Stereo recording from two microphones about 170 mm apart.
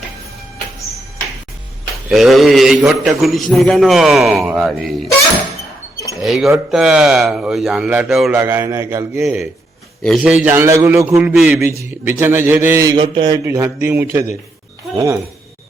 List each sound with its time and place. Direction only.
2.0 s a man's voice: centre (ahead or behind)
6.2 s a man's voice: centre (ahead or behind)
8.4 s a man's voice: 15° right (ahead or behind)
9.2 s a man's voice: 5° right (ahead or behind)
12.9 s speech: 30° right (ahead or behind)
13.4 s a man's voice: 15° right (ahead or behind)